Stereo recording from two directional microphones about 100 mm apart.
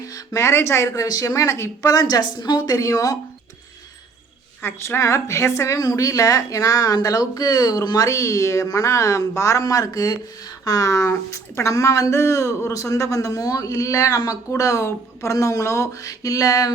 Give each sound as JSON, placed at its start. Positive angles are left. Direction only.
{"t": 0.0, "sound": "a woman's voice", "side_deg": 30}
{"t": 4.6, "sound": "a woman's voice", "side_deg": 25}